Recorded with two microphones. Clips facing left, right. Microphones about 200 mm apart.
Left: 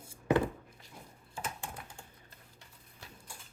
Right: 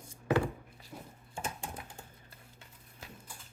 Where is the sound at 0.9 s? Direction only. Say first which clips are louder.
Right 6 dB; 50° right (ahead or behind).